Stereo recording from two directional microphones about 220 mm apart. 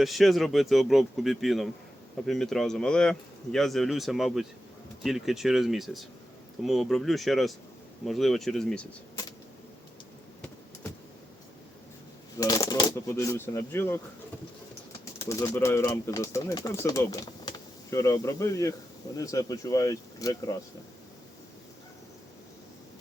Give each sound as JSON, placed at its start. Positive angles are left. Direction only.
{"t": 0.0, "sound": "speech", "side_deg": 0}
{"t": 12.4, "sound": "speech", "side_deg": 15}
{"t": 15.2, "sound": "speech", "side_deg": 15}